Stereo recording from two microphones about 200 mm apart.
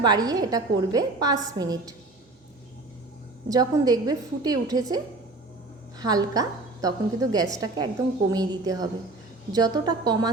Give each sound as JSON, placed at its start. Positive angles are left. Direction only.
{"t": 0.0, "sound": "a woman's voice", "side_deg": -20}
{"t": 3.5, "sound": "a woman's voice", "side_deg": -20}
{"t": 6.0, "sound": "a woman's voice", "side_deg": -20}